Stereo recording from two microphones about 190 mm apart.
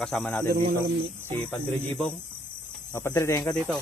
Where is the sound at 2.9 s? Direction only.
15° left (ahead or behind).